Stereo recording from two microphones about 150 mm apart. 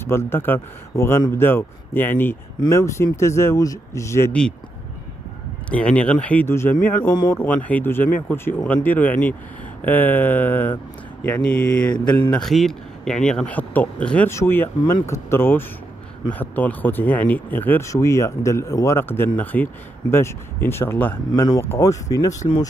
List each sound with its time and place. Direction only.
0.0 s speech: 15° left (ahead or behind)
5.7 s speech: 10° left (ahead or behind)